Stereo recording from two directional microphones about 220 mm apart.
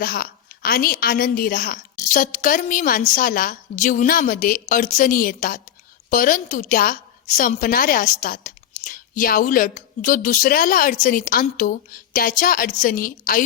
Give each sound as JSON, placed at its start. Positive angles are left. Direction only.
{"t": 0.0, "sound": "a woman's voice", "side_deg": 40}